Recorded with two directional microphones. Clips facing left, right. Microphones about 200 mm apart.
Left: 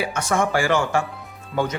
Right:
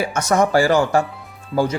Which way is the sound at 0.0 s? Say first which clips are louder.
Right 4 dB; 45° right (ahead or behind).